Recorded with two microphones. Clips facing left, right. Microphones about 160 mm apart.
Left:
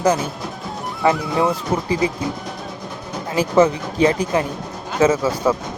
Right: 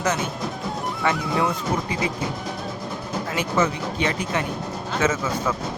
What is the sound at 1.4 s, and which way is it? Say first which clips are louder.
Speech: left 4 dB; 30° left (ahead or behind).